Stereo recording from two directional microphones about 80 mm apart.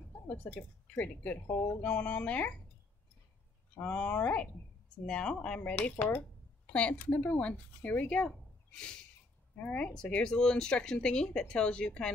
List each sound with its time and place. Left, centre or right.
0.4 s speech: left
3.7 s speech: centre